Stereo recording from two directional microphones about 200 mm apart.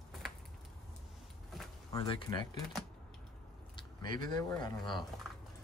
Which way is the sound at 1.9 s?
20° left (ahead or behind).